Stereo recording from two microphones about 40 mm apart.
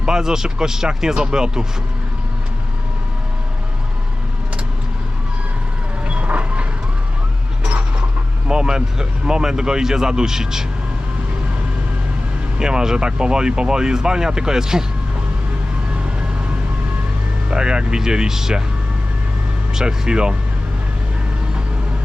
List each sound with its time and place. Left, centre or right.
0.0 s speech: centre
6.1 s vehicle: right
8.4 s speech: centre
12.5 s speech: centre
15.9 s vehicle: right
17.5 s speech: right
19.7 s speech: centre